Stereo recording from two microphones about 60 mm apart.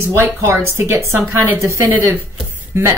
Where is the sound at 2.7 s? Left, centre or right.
Right.